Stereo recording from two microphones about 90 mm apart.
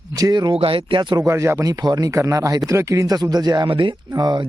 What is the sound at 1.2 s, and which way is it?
Speech, 30° right (ahead or behind).